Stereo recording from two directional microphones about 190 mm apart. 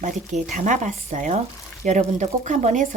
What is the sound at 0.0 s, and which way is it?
Speech, 40° right (ahead or behind).